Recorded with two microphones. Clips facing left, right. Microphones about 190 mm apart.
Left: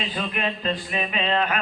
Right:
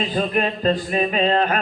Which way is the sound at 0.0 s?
40° right (ahead or behind).